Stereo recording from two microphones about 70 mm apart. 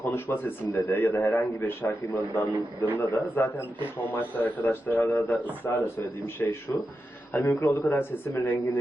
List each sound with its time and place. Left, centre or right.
0.0 s a man's voice: left
1.6 s a man's voice: left
5.6 s a man's voice: left